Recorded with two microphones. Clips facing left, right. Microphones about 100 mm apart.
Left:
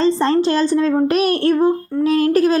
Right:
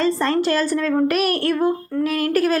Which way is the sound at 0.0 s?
25° left (ahead or behind).